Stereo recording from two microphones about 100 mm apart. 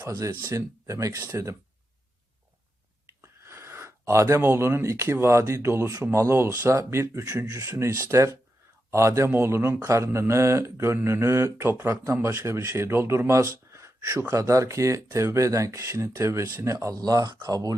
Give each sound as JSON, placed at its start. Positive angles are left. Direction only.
{"t": 0.5, "sound": "speech", "side_deg": -30}
{"t": 3.1, "sound": "a man's voice", "side_deg": -25}
{"t": 16.7, "sound": "speech", "side_deg": -40}